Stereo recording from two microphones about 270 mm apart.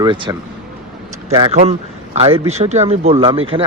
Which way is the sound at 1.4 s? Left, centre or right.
Right.